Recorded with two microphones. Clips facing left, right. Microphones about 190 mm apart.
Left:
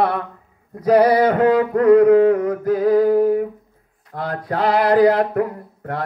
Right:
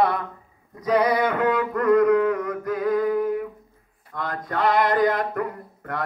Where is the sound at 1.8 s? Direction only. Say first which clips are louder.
Left 6 dB; 60° left (ahead or behind).